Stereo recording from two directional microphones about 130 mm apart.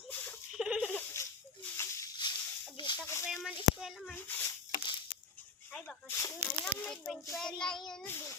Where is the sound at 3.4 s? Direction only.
Centre (ahead or behind).